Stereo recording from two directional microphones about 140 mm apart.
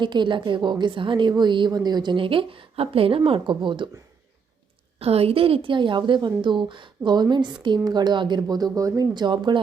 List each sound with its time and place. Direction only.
0.0 s a woman's voice: 35° right (ahead or behind)
4.9 s a woman's voice: 45° right (ahead or behind)